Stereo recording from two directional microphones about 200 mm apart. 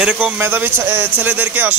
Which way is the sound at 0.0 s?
10° right (ahead or behind).